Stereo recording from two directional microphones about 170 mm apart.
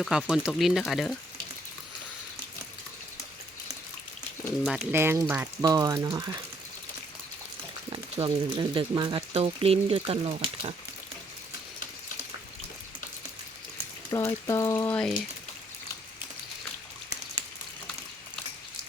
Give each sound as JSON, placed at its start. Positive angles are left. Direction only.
{"t": 0.0, "sound": "speech", "side_deg": 0}
{"t": 4.6, "sound": "speech", "side_deg": -5}
{"t": 4.9, "sound": "speech", "side_deg": -15}
{"t": 7.9, "sound": "speech", "side_deg": -30}
{"t": 14.1, "sound": "speech", "side_deg": 20}
{"t": 14.9, "sound": "speech", "side_deg": 5}